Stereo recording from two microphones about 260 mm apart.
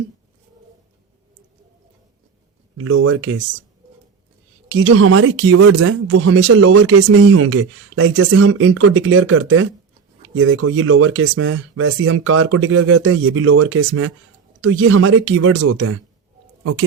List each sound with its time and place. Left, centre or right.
2.7 s speech: right
4.7 s speech: right